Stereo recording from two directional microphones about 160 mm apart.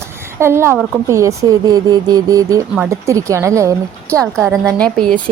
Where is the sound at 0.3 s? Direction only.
15° right (ahead or behind).